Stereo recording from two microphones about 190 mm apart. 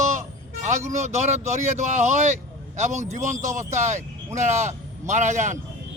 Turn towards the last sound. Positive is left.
turn(degrees=-40)  # may be behind; listen again after turning